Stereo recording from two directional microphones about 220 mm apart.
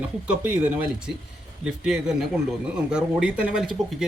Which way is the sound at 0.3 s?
5° right (ahead or behind).